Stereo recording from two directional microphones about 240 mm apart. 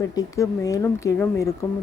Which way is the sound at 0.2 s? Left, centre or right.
Centre.